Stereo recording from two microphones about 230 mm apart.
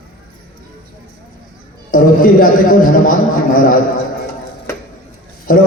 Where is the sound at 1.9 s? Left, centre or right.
Left.